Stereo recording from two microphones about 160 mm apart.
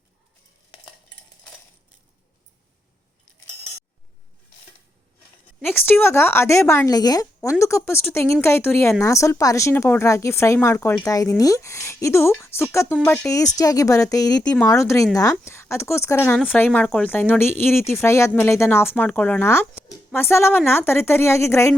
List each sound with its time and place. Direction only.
5.6 s speech: 15° left (ahead or behind)
14.4 s speech: 10° left (ahead or behind)
14.7 s speech: 20° left (ahead or behind)